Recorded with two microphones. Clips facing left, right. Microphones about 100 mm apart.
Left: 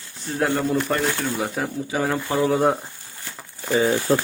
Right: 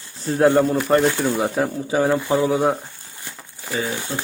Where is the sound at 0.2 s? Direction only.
30° right (ahead or behind).